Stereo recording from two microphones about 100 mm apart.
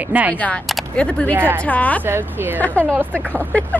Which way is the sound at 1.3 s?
20° right (ahead or behind).